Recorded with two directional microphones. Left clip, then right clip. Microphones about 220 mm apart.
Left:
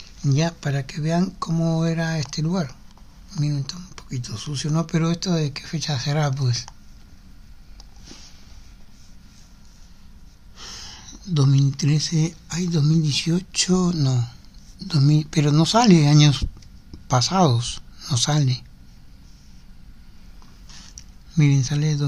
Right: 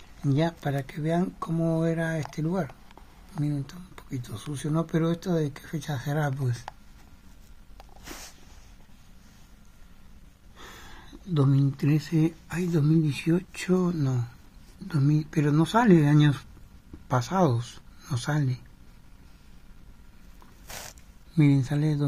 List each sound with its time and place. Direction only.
0.2 s speech: 5° left (ahead or behind)
1.6 s speech: 20° left (ahead or behind)
10.6 s a sound: centre (ahead or behind)
11.3 s speech: 5° left (ahead or behind)
21.4 s speech: centre (ahead or behind)